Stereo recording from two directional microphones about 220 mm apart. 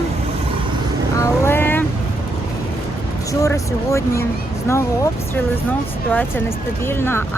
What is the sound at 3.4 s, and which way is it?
Speech, 15° left (ahead or behind).